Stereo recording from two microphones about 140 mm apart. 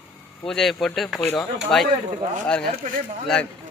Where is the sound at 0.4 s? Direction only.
5° left (ahead or behind).